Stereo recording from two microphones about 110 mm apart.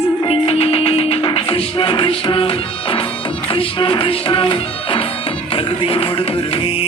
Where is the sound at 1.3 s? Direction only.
55° left (ahead or behind).